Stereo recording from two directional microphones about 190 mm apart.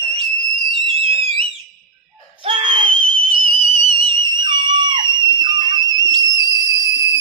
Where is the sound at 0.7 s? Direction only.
25° right (ahead or behind).